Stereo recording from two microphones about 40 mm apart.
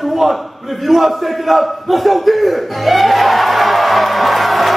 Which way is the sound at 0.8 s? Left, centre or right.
Centre.